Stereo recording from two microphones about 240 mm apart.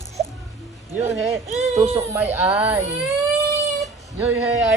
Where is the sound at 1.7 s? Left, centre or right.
Right.